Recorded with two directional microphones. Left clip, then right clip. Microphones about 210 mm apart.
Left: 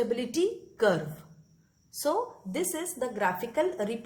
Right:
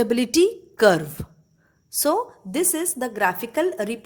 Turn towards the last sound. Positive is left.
turn(degrees=-40)  # may be behind; listen again after turning